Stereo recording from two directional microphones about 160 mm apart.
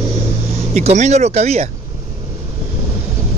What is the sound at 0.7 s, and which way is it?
Speech, 45° right (ahead or behind).